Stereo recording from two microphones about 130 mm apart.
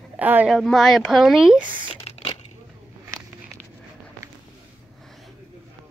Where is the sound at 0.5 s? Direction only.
Centre (ahead or behind).